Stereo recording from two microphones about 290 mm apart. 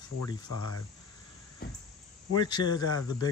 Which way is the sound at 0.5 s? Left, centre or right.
Right.